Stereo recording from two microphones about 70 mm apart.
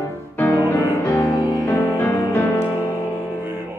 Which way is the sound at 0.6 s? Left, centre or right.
Left.